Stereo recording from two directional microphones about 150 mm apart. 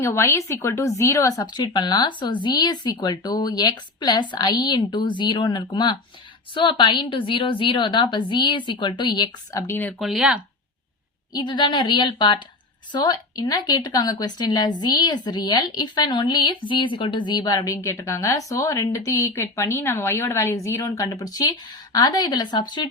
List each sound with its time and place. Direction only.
0.0 s a woman's voice: 20° left (ahead or behind)
10.0 s speech: 5° right (ahead or behind)
11.3 s a woman's voice: 30° left (ahead or behind)